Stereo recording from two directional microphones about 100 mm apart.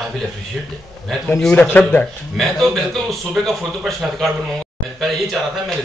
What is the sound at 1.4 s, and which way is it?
Speech, 10° left (ahead or behind).